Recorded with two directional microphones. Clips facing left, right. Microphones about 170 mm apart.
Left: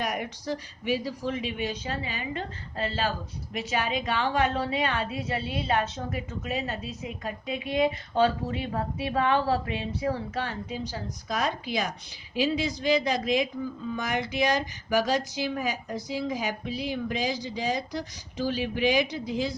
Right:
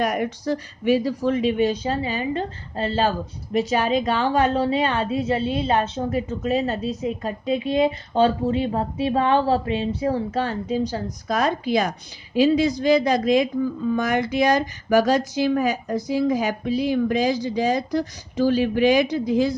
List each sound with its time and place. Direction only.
0.0 s a woman's voice: 50° right (ahead or behind)
10.9 s a woman's voice: 50° right (ahead or behind)